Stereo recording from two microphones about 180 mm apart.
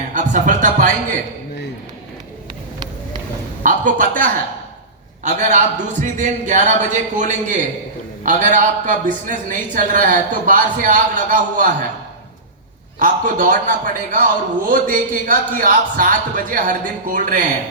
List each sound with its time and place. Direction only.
0.1 s speech: 45° right (ahead or behind)
3.6 s a man's voice: 45° right (ahead or behind)
13.0 s a man's voice: 45° right (ahead or behind)